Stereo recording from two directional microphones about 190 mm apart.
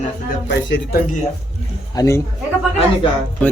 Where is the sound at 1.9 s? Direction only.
20° left (ahead or behind).